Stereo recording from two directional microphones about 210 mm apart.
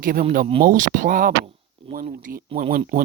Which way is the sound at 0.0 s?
45° right (ahead or behind).